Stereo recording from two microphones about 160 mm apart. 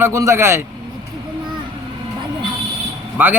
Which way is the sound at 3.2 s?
10° right (ahead or behind).